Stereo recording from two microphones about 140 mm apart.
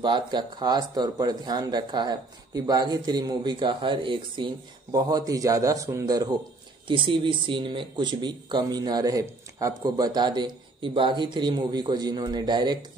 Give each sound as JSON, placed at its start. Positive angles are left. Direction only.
{"t": 0.0, "sound": "a man's voice", "side_deg": -35}